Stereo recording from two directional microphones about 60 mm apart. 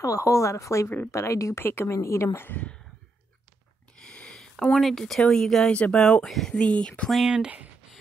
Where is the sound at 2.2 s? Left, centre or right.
Left.